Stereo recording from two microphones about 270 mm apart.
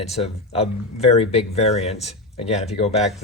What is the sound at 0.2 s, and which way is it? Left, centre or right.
Speech, left.